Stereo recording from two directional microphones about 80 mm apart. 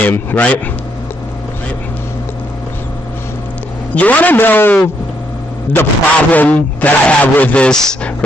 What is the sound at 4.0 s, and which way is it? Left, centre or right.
Speech, left.